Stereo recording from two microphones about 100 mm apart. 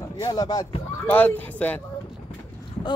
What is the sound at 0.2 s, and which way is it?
Speech, 40° left (ahead or behind).